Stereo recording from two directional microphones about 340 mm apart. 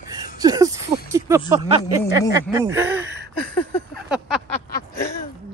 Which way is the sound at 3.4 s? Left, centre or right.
Centre.